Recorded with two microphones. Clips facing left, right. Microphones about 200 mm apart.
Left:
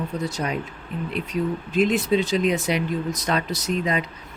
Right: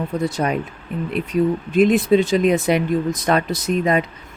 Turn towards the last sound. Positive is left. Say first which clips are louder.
# right 6 dB
turn(degrees=-50)  # may be behind; listen again after turning